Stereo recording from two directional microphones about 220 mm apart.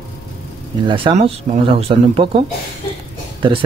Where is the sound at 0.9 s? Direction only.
25° right (ahead or behind).